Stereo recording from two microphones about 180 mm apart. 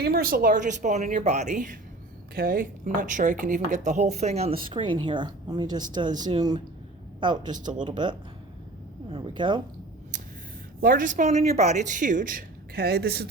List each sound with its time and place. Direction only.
0.0 s a woman's voice: 55° right (ahead or behind); by 8.1 s 25° right (ahead or behind)
9.0 s cat: 25° right (ahead or behind)
10.8 s speech: 50° right (ahead or behind)